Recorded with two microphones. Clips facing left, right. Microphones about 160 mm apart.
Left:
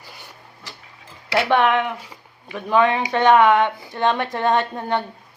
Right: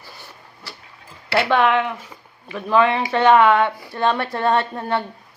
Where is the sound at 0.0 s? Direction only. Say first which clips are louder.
Right 1 dB; 15° left (ahead or behind).